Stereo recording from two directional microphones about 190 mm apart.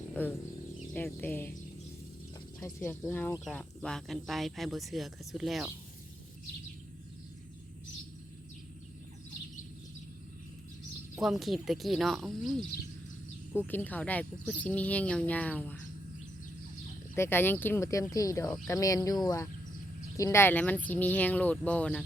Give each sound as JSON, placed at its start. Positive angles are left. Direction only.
{"t": 0.1, "sound": "speech", "side_deg": 10}
{"t": 2.6, "sound": "speech", "side_deg": 15}
{"t": 11.1, "sound": "speech", "side_deg": 0}
{"t": 13.7, "sound": "speech", "side_deg": 10}
{"t": 17.2, "sound": "speech", "side_deg": 10}